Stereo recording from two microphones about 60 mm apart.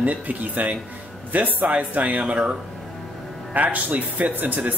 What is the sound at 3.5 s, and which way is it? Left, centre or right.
Speech, right.